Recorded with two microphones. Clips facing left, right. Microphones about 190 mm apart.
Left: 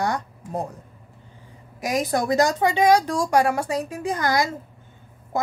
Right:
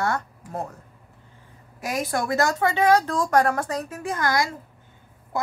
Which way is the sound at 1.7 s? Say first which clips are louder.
Left 3 dB; 15° left (ahead or behind).